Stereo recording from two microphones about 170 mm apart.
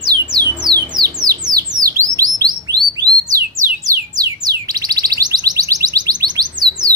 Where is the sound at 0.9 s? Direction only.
20° right (ahead or behind).